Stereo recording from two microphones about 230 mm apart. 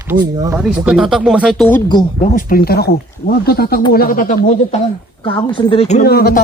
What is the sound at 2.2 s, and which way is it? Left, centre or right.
Speech, left.